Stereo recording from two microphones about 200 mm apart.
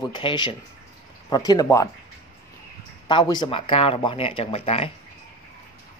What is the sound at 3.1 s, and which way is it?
Speech, 20° left (ahead or behind).